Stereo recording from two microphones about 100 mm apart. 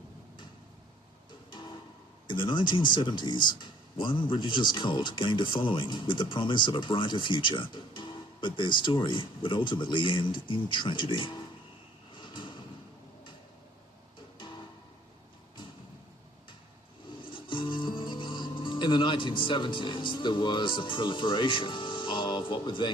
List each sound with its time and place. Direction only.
2.2 s speech: 55° left (ahead or behind)
12.1 s a sound: 50° left (ahead or behind)
14.3 s music: 50° left (ahead or behind)
17.2 s music: 60° left (ahead or behind)